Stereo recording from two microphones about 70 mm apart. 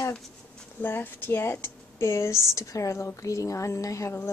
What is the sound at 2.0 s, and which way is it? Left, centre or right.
Speech, left.